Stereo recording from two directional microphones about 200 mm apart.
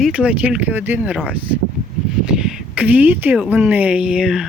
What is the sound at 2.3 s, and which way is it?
Speech, 5° right (ahead or behind).